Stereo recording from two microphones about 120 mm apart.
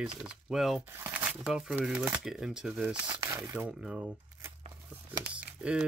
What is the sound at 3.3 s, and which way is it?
Speech, 25° right (ahead or behind).